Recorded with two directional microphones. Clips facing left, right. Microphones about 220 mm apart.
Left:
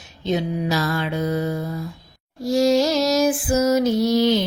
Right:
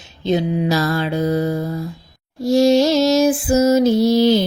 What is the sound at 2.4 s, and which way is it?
Female singing, 25° right (ahead or behind).